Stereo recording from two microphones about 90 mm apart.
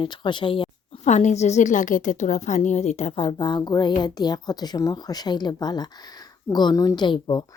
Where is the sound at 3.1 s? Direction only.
75° left (ahead or behind); by 7.0 s 45° left (ahead or behind).